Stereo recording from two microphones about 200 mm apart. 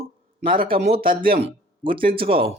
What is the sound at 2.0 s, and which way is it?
Speech, 45° right (ahead or behind).